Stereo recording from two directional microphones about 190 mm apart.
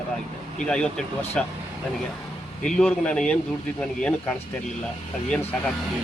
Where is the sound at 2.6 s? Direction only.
5° left (ahead or behind).